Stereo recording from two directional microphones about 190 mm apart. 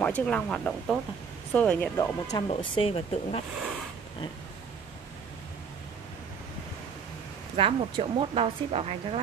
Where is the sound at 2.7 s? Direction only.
30° left (ahead or behind).